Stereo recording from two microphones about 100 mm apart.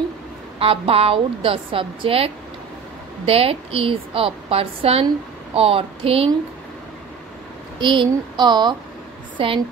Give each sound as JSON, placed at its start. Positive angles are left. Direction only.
{"t": 0.6, "sound": "a woman's voice", "side_deg": -70}
{"t": 7.8, "sound": "speech", "side_deg": -55}
{"t": 9.4, "sound": "a woman's voice", "side_deg": -60}